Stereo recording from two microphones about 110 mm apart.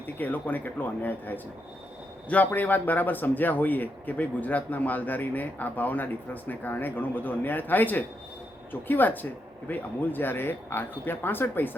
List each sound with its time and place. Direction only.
0.2 s speech: 15° left (ahead or behind)